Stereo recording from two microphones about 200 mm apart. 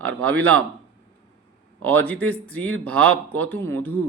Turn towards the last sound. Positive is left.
turn(degrees=10)  # may be behind; listen again after turning